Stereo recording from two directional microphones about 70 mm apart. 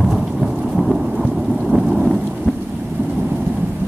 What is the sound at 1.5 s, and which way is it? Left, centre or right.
Thunder, centre.